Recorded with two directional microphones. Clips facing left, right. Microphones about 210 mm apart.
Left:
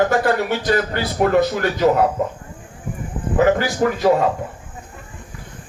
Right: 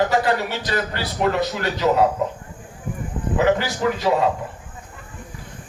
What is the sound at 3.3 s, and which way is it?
Speech, 50° left (ahead or behind).